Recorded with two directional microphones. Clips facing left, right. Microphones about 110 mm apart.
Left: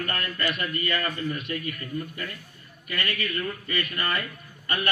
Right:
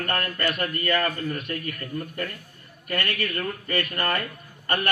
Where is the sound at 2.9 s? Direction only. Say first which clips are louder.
Right 3 dB; 55° right (ahead or behind).